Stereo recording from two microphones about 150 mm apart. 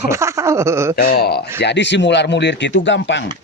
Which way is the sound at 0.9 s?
90° left.